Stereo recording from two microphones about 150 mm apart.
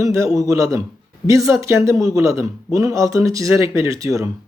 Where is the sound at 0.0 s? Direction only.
20° right (ahead or behind).